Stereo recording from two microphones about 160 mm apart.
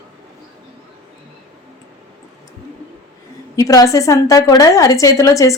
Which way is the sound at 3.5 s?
20° left (ahead or behind).